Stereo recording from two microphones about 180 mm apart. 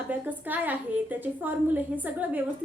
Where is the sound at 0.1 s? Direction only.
10° right (ahead or behind).